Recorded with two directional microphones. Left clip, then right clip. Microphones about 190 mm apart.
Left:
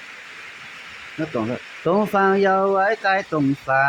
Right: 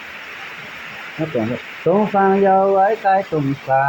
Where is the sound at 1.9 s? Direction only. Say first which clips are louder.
Right 3 dB; 45° left (ahead or behind).